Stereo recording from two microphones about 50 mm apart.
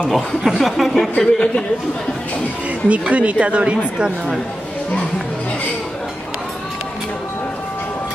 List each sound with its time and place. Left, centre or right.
0.1 s speech: centre
1.1 s speech: centre
2.9 s speech: right